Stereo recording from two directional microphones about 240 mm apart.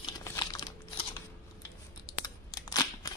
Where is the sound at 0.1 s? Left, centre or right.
Centre.